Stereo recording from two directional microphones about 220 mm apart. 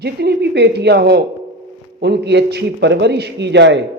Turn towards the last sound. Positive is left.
turn(degrees=-50)  # may be behind; listen again after turning